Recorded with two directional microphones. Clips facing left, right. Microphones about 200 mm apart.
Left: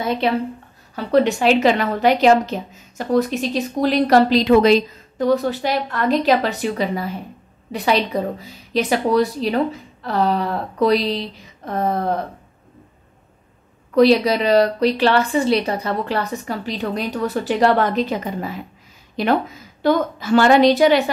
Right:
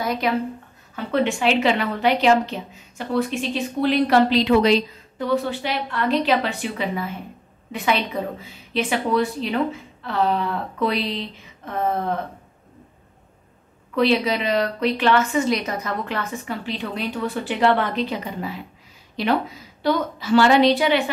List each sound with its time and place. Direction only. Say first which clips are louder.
0.0 s speech: left 3 dB; 25° left (ahead or behind)
0.9 s a woman's voice: left 5 dB; 40° left (ahead or behind)
13.9 s a woman's voice: left 6 dB; 40° left (ahead or behind)